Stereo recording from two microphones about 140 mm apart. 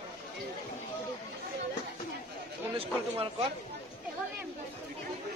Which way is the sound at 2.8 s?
40° right (ahead or behind).